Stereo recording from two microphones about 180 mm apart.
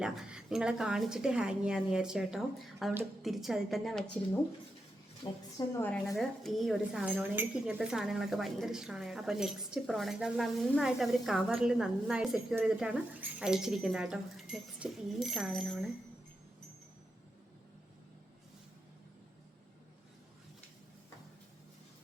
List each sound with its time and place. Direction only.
0.0 s speech: 5° right (ahead or behind)
5.2 s a woman's voice: 20° left (ahead or behind)
5.8 s speech: 5° left (ahead or behind)